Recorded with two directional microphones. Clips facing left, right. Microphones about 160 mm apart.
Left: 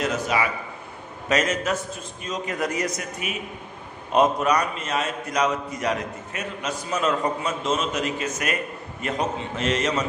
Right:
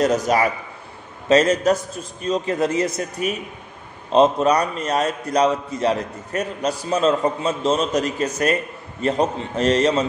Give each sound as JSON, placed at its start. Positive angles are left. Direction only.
{"t": 0.0, "sound": "a man's voice", "side_deg": -40}